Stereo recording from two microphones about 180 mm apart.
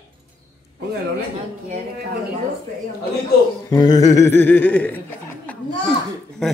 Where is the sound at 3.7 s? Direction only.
20° left (ahead or behind).